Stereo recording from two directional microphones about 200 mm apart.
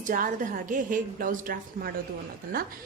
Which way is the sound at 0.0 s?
40° right (ahead or behind).